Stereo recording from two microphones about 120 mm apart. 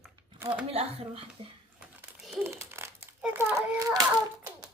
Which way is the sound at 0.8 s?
55° right (ahead or behind).